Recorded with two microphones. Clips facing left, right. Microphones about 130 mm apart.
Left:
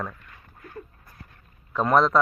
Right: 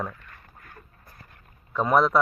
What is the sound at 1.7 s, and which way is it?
Speech, 5° right (ahead or behind).